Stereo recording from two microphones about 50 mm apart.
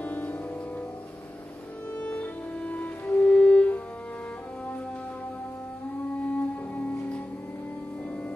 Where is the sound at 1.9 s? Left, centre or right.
Left.